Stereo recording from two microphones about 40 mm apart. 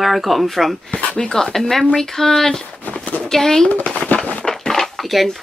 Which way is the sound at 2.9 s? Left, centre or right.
Left.